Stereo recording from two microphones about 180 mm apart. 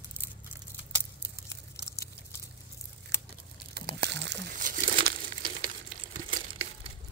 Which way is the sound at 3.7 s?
60° right (ahead or behind).